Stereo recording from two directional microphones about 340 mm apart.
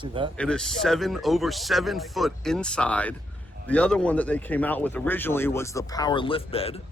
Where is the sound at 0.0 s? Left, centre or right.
Centre.